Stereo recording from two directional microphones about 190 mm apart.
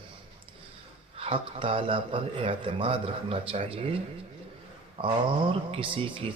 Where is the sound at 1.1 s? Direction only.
30° right (ahead or behind).